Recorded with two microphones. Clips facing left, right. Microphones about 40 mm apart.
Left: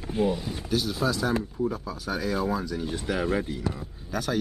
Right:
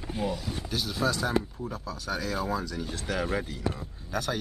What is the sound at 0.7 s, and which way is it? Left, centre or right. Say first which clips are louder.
Speech: left 3 dB; centre.